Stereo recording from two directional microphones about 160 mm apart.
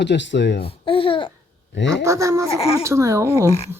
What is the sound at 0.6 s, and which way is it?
Speech, 35° left (ahead or behind).